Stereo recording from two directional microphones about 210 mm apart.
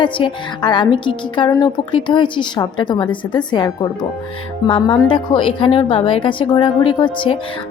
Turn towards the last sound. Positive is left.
turn(degrees=25)  # may be behind; listen again after turning